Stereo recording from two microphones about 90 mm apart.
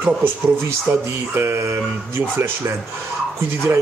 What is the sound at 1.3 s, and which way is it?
Speech, 30° right (ahead or behind).